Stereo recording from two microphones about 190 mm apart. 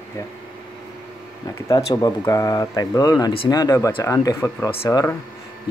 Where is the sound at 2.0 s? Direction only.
15° left (ahead or behind).